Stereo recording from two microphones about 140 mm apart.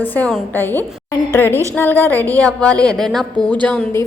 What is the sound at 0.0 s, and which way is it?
A woman's voice, 10° left (ahead or behind).